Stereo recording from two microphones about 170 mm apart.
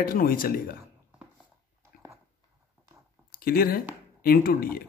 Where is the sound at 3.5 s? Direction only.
60° left (ahead or behind).